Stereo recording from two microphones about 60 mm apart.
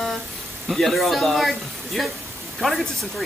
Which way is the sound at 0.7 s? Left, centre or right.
Centre.